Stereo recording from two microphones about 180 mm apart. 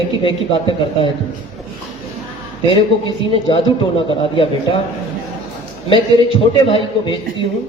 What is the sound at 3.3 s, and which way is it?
A man's voice, 30° left (ahead or behind).